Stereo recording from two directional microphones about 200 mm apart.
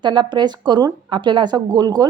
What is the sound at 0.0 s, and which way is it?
A woman's voice, 20° right (ahead or behind).